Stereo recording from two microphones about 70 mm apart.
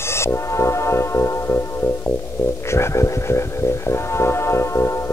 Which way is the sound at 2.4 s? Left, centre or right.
Left.